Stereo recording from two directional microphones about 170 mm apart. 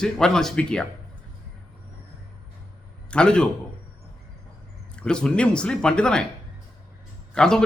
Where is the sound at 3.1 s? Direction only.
5° left (ahead or behind).